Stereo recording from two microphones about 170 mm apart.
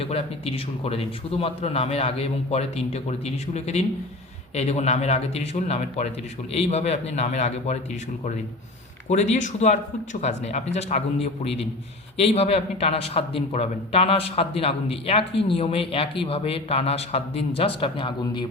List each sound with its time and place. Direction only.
0.0 s a man's voice: 35° left (ahead or behind)
9.0 s a man's voice: 40° left (ahead or behind)